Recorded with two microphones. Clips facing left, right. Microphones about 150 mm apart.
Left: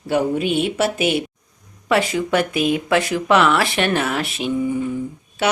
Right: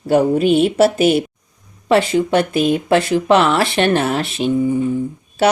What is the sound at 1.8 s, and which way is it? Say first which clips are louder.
Speech: right 5 dB; 30° right (ahead or behind).